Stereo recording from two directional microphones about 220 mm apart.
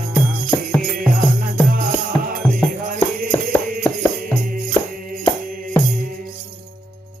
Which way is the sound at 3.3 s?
5° left (ahead or behind).